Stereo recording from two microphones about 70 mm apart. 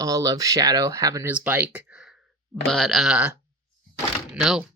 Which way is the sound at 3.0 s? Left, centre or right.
Centre.